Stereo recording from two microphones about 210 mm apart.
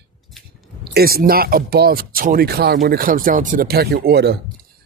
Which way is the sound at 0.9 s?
45° right (ahead or behind).